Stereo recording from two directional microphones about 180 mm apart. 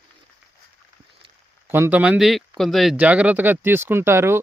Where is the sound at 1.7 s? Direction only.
10° right (ahead or behind).